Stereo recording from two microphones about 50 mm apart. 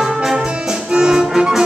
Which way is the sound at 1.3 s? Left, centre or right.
Centre.